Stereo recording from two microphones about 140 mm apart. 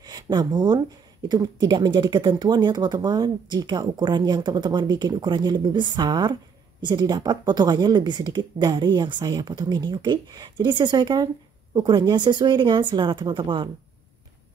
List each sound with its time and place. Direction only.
0.0 s speech: 30° right (ahead or behind)